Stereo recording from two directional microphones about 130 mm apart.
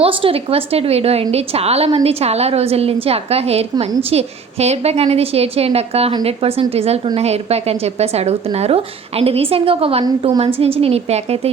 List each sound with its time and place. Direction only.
0.0 s a woman's voice: 45° right (ahead or behind)